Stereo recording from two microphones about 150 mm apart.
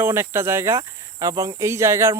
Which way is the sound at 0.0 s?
15° right (ahead or behind).